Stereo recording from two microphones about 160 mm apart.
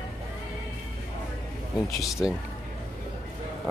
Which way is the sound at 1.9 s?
Centre (ahead or behind).